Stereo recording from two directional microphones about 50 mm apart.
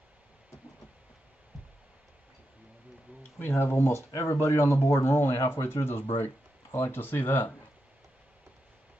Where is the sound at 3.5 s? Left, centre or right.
Left.